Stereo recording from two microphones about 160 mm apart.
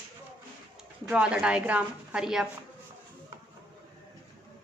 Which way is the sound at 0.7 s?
5° right (ahead or behind).